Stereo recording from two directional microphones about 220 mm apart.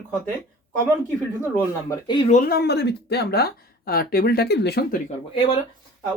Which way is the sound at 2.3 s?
45° left (ahead or behind).